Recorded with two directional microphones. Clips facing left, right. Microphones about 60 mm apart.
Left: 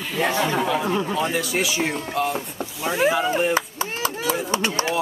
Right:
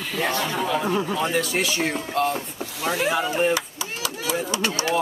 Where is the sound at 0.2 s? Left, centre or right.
Centre.